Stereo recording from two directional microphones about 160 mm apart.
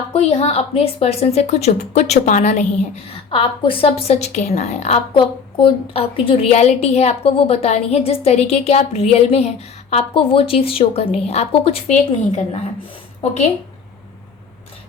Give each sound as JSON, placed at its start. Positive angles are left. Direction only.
{"t": 0.1, "sound": "a woman's voice", "side_deg": 40}